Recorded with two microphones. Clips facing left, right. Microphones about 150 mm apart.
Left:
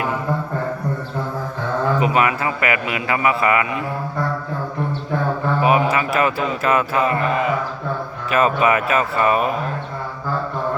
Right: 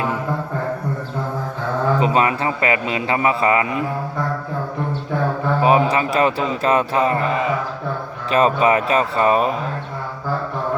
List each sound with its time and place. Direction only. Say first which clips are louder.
2.0 s a man's voice: right 1 dB; 30° right (ahead or behind)
5.6 s a man's voice: right 2 dB; 30° right (ahead or behind)
8.3 s a man's voice: right 1 dB; 30° right (ahead or behind)